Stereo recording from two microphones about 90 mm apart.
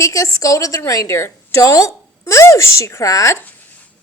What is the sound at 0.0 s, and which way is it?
A woman's voice, 40° left (ahead or behind).